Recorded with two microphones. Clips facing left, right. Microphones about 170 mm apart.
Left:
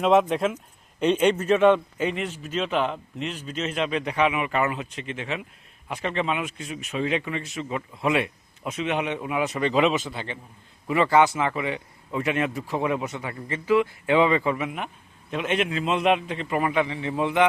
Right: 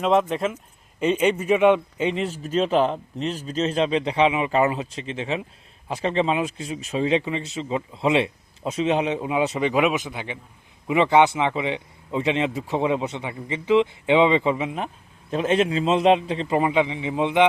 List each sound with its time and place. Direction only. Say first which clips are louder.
0.0 s speech: left 1 dB; centre (ahead or behind)
2.0 s a man's voice: right 3 dB; 30° right (ahead or behind)
9.6 s speech: right 1 dB; 10° right (ahead or behind)